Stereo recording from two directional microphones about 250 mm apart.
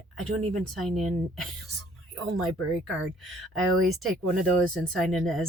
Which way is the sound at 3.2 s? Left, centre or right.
Centre.